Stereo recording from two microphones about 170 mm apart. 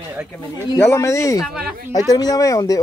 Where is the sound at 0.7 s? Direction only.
15° left (ahead or behind).